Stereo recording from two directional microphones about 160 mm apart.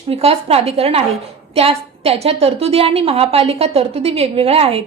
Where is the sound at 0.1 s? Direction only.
40° right (ahead or behind).